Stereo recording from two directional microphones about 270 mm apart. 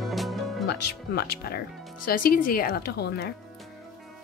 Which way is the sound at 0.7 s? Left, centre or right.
Left.